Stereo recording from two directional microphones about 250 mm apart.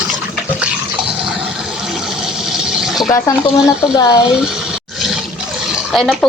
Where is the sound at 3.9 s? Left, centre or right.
Centre.